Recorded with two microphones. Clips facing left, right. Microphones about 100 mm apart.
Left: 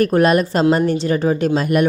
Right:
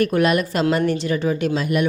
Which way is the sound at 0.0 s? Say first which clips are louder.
Left 4 dB; 40° left (ahead or behind).